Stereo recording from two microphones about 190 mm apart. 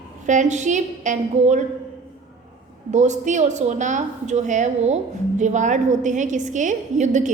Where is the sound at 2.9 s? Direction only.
40° right (ahead or behind).